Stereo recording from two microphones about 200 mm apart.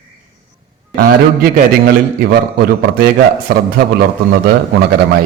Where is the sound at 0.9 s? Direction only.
50° right (ahead or behind).